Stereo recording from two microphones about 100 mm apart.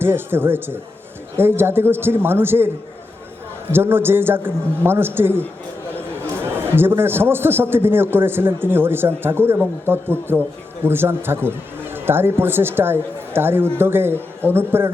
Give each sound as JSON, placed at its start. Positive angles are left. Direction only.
{"t": 0.0, "sound": "a man's voice", "side_deg": -20}
{"t": 3.7, "sound": "a man's voice", "side_deg": -20}